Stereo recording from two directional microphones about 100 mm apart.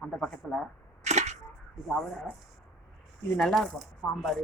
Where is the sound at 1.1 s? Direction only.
90° right.